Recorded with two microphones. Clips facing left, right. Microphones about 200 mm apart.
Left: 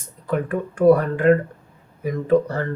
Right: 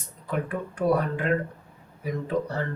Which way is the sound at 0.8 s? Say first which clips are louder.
Left 9 dB; 50° left (ahead or behind).